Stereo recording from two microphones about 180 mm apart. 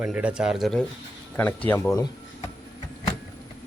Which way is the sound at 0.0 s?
5° right (ahead or behind).